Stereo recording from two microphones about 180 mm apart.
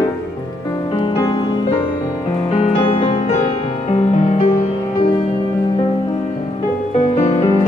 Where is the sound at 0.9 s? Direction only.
30° left (ahead or behind).